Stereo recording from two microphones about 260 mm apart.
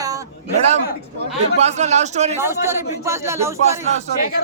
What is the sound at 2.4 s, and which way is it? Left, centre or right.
Speech, centre.